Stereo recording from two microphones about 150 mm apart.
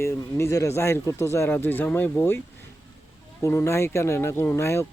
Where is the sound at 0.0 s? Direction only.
15° left (ahead or behind).